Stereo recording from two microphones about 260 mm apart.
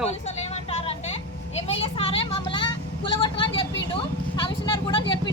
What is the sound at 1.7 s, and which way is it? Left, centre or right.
Speech, left.